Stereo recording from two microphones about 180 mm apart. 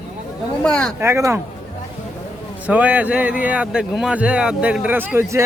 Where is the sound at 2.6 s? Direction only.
10° right (ahead or behind).